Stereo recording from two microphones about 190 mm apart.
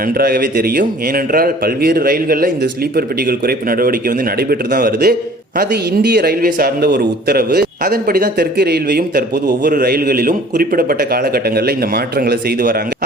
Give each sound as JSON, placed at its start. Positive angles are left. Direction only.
{"t": 0.2, "sound": "a man's voice", "side_deg": -55}